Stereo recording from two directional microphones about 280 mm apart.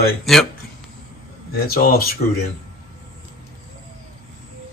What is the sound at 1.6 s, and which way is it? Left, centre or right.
Speech, left.